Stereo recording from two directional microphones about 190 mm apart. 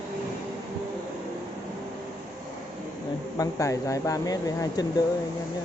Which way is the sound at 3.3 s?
15° left (ahead or behind).